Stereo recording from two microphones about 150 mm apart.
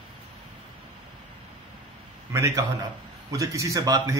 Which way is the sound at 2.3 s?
20° right (ahead or behind).